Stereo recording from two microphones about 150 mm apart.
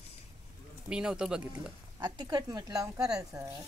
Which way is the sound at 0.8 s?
5° right (ahead or behind).